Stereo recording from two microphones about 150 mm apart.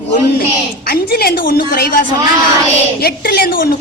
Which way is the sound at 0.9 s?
90° left.